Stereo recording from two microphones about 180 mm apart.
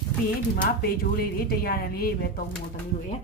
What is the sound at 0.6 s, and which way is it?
Speech, 55° left (ahead or behind).